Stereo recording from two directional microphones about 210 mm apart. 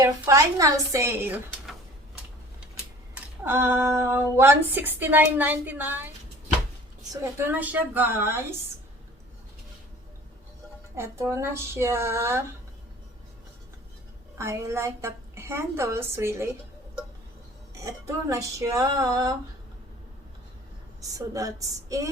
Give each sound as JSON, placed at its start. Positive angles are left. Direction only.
{"t": 0.0, "sound": "speech", "side_deg": -15}
{"t": 3.4, "sound": "speech", "side_deg": -10}
{"t": 7.1, "sound": "speech", "side_deg": -10}
{"t": 10.9, "sound": "speech", "side_deg": -10}
{"t": 14.3, "sound": "speech", "side_deg": -15}
{"t": 17.8, "sound": "speech", "side_deg": -15}
{"t": 21.0, "sound": "speech", "side_deg": -15}